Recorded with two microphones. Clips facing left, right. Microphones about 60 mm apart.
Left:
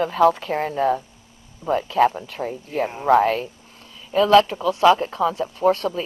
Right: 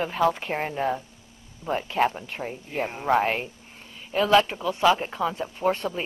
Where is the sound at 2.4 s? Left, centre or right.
Centre.